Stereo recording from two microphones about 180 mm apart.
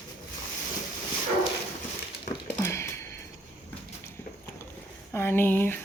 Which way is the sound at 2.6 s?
15° left (ahead or behind).